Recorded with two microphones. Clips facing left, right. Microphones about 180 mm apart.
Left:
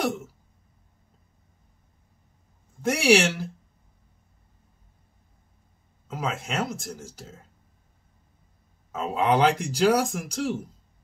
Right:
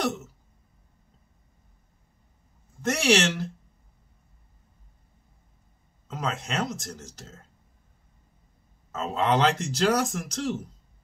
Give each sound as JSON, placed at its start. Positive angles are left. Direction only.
{"t": 0.0, "sound": "a sound", "side_deg": 10}
{"t": 2.8, "sound": "speech", "side_deg": 10}
{"t": 6.0, "sound": "speech", "side_deg": 10}
{"t": 8.9, "sound": "speech", "side_deg": 10}